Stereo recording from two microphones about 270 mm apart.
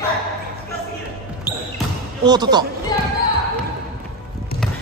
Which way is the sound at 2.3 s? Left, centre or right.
Centre.